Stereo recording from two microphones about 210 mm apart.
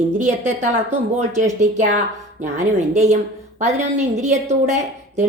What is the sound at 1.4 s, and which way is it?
A woman's voice, 35° right (ahead or behind).